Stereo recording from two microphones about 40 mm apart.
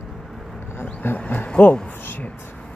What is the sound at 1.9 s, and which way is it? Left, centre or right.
Speech, left.